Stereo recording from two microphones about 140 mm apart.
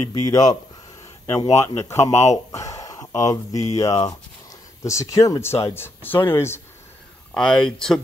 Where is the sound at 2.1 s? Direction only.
50° left (ahead or behind).